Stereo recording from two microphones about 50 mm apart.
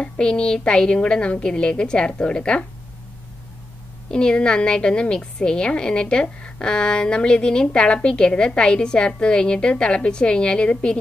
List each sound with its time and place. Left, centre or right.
0.0 s a woman's voice: centre
4.1 s a woman's voice: centre